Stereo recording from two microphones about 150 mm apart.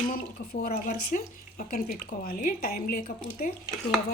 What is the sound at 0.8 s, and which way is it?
A woman's voice, 60° left (ahead or behind).